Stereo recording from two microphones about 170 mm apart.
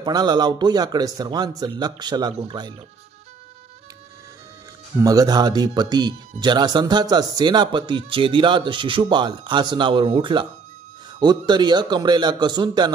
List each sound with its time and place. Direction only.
0.0 s a man's voice: 25° right (ahead or behind)
5.0 s a man's voice: 20° right (ahead or behind)